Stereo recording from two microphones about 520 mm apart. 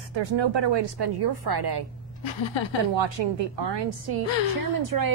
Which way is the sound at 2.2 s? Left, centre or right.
Left.